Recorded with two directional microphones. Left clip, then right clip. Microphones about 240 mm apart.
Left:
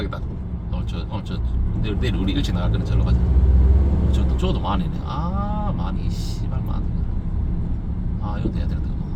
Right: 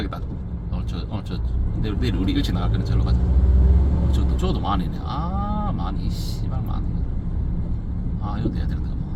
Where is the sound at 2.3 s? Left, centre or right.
Centre.